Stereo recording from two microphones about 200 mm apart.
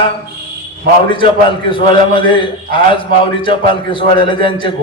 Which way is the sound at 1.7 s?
25° left (ahead or behind).